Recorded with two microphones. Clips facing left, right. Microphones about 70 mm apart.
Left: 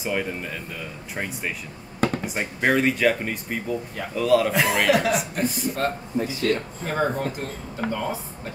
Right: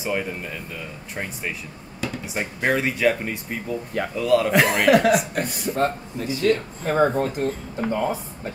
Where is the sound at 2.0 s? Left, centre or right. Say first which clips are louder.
Left 6 dB; left.